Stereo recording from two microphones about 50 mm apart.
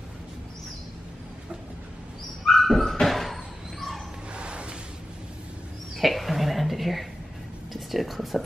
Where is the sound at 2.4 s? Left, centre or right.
Centre.